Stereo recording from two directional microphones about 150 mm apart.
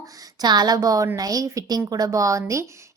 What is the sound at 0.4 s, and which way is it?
A woman's voice, 25° right (ahead or behind).